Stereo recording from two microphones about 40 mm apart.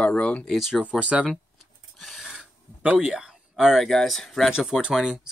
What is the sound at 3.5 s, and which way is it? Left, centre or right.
Speech, centre.